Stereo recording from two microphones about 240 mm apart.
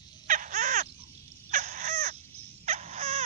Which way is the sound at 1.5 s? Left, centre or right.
Right.